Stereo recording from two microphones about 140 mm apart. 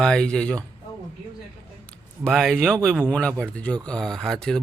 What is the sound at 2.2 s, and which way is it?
Speech, centre (ahead or behind).